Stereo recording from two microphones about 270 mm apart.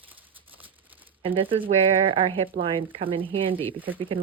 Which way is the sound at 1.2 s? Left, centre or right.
Centre.